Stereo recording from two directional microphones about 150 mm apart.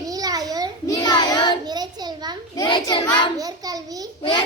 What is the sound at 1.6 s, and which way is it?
Child singing, 25° right (ahead or behind).